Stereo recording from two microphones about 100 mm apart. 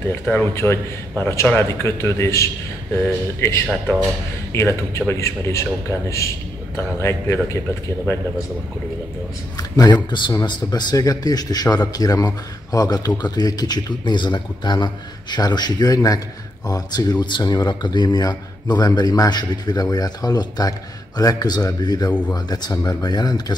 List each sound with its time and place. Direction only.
0.3 s a man's voice: 20° left (ahead or behind)
9.6 s a man's voice: 40° left (ahead or behind)